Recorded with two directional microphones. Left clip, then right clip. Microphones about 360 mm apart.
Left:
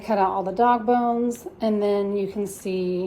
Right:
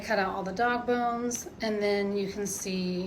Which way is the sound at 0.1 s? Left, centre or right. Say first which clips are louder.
Left 7 dB; left.